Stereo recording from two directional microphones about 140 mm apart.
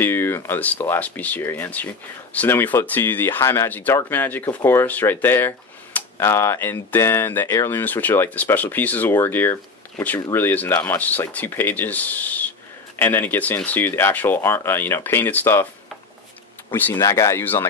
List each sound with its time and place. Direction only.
0.0 s speech: 15° left (ahead or behind)
16.7 s speech: 15° left (ahead or behind)